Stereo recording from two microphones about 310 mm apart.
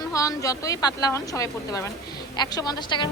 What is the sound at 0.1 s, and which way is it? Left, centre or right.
A woman's voice, centre.